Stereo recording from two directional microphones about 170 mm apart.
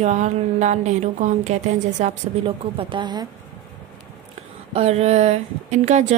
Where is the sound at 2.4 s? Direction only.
30° right (ahead or behind).